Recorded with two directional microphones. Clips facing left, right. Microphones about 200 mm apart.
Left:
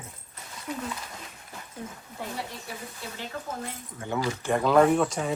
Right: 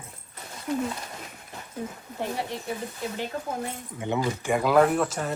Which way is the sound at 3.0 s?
20° right (ahead or behind).